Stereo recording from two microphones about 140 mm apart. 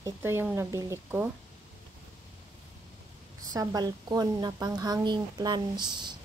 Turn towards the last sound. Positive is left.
turn(degrees=-30)  # may be behind; listen again after turning